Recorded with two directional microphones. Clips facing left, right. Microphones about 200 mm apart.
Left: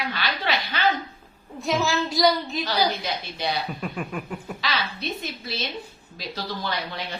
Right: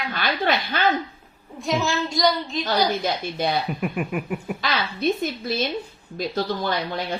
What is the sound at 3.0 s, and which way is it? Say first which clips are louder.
Speech: right 5 dB; 50° right (ahead or behind).